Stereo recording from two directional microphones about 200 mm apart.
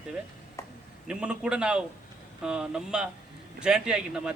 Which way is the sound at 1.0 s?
5° right (ahead or behind).